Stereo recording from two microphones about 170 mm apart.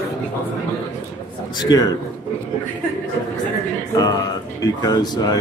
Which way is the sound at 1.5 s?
25° left (ahead or behind).